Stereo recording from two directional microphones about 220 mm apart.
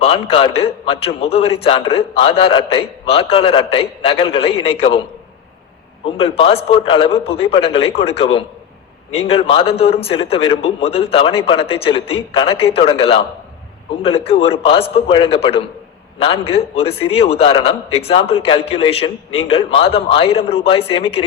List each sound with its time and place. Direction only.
0.0 s a man's voice: 25° left (ahead or behind)
6.1 s a man's voice: 25° left (ahead or behind)